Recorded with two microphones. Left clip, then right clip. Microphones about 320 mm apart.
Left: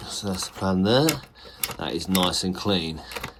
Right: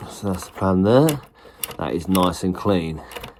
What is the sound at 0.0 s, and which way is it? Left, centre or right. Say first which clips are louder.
Speech: right 2 dB; centre.